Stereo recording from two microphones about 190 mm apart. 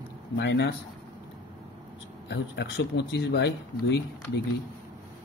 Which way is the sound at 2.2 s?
65° left (ahead or behind).